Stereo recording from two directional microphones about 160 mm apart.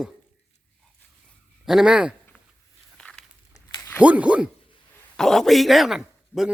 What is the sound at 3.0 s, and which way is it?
Walk, 5° left (ahead or behind).